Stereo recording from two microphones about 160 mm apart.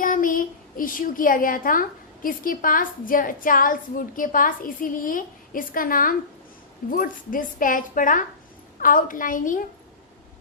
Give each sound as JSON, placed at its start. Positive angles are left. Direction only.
{"t": 0.0, "sound": "a woman's voice", "side_deg": 60}